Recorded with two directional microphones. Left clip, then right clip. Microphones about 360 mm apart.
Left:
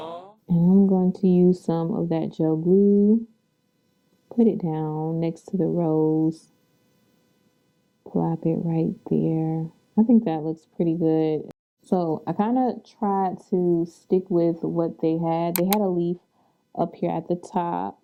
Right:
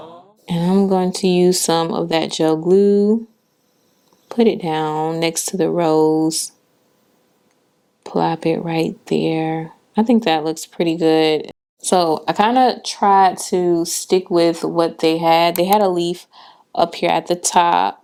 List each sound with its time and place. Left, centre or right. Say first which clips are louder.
0.0 s a sound: left 2 dB; centre
0.9 s speech: right 6 dB; centre
4.3 s speech: right 7 dB; centre
8.0 s speech: right 8 dB; centre